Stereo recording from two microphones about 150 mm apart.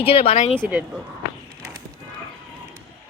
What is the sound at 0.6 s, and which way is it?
Speech, 10° right (ahead or behind).